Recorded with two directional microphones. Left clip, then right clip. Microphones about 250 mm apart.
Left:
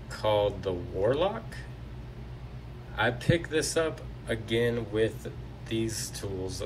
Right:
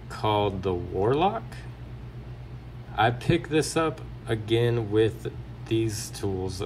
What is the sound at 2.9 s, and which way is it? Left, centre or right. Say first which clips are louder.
Speech: right 4 dB; centre.